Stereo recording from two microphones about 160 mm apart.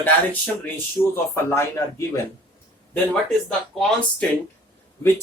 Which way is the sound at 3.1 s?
5° left (ahead or behind).